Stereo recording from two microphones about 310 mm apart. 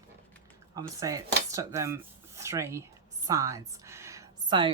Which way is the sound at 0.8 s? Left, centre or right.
Centre.